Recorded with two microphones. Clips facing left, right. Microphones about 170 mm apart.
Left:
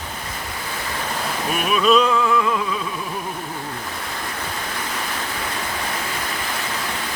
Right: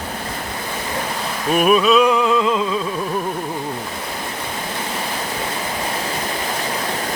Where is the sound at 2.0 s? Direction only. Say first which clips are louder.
Right 3 dB; 20° right (ahead or behind).